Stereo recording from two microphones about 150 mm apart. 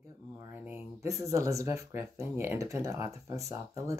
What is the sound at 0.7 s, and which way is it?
Speech, 15° right (ahead or behind).